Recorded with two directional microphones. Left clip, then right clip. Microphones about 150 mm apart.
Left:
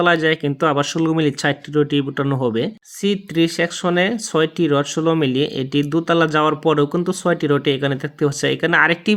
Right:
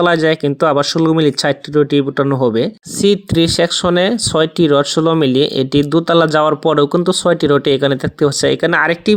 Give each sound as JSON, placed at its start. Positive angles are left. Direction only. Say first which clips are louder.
{"t": 0.0, "sound": "speech", "louder": "right 4 dB", "side_deg": -30}
{"t": 3.0, "sound": "speech", "louder": "right 6 dB", "side_deg": -40}